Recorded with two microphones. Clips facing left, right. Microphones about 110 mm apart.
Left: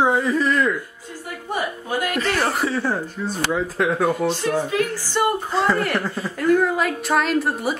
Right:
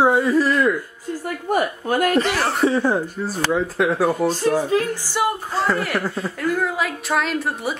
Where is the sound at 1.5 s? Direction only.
50° right (ahead or behind).